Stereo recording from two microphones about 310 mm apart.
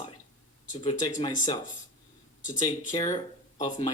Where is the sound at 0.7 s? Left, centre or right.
Centre.